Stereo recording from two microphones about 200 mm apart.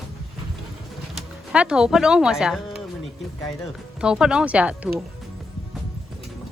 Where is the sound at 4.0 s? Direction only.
5° right (ahead or behind).